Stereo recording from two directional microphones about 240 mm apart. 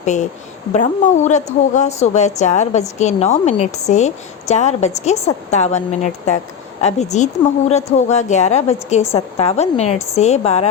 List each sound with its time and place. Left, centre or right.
0.0 s a woman's voice: left